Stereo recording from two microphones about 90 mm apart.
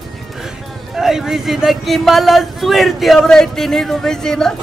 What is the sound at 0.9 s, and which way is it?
Speech, 5° right (ahead or behind).